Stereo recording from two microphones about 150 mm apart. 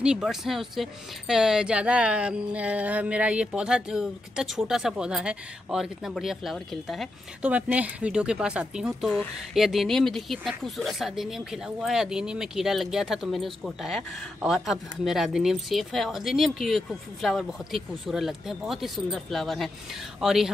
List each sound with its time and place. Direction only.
0.0 s speech: 5° right (ahead or behind)